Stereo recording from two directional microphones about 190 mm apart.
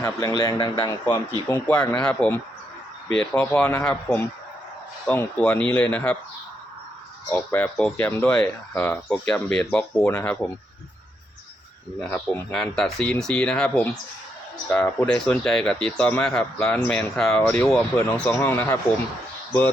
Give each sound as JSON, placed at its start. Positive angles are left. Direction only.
{"t": 0.0, "sound": "speech", "side_deg": 20}
{"t": 0.8, "sound": "speech", "side_deg": 10}
{"t": 5.0, "sound": "speech", "side_deg": 5}
{"t": 7.3, "sound": "speech", "side_deg": 10}
{"t": 11.9, "sound": "speech", "side_deg": 5}